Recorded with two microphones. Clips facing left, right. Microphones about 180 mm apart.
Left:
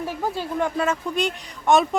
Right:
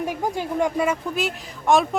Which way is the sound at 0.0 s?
15° right (ahead or behind).